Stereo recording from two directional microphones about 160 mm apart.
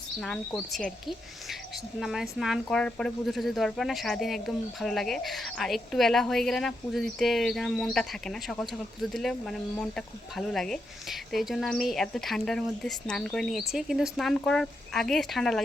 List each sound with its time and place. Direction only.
0.2 s speech: 5° left (ahead or behind)